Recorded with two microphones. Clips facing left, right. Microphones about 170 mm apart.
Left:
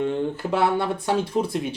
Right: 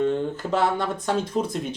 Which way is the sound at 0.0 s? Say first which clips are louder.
Right 1 dB; 10° left (ahead or behind).